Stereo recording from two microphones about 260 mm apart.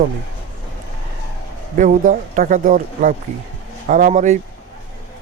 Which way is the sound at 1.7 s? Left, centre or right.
Right.